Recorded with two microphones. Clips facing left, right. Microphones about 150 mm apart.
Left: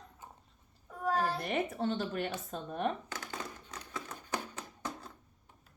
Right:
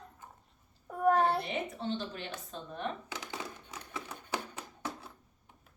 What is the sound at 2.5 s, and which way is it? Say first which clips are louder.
Speech: left 3 dB; 40° left (ahead or behind).